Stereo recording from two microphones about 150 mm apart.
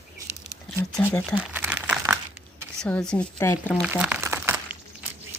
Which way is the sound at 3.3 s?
25° left (ahead or behind).